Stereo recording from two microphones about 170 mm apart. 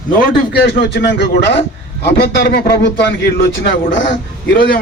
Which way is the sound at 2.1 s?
80° left.